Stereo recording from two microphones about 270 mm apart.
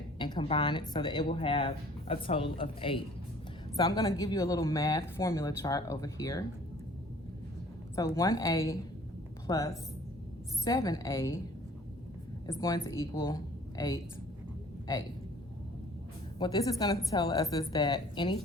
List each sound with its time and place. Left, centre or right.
0.2 s speech: centre
7.9 s speech: centre
12.5 s speech: centre
16.4 s speech: centre